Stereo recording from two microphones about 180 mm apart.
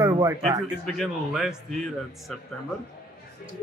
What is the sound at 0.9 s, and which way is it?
Speech, centre (ahead or behind).